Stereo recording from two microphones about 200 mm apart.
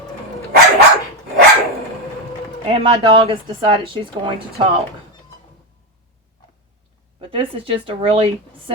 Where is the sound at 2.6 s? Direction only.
30° right (ahead or behind).